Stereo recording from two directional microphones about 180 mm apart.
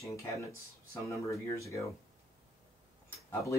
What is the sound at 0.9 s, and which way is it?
Speech, 15° left (ahead or behind).